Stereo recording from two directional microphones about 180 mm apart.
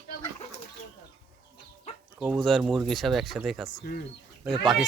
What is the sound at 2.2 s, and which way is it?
Speech, centre (ahead or behind).